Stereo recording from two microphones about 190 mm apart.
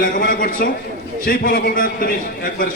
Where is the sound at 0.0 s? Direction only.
45° left (ahead or behind).